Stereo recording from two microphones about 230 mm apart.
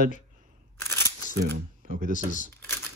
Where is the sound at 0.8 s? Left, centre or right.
Centre.